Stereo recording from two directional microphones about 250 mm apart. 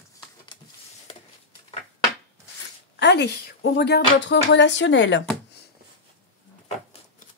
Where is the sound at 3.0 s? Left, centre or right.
Left.